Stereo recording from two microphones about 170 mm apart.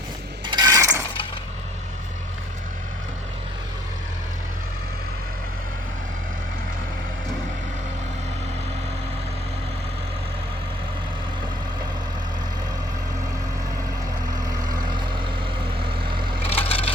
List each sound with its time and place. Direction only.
0.4 s mechanisms: 25° right (ahead or behind)
15.8 s vehicle: 30° right (ahead or behind)
16.5 s splinter: 35° left (ahead or behind)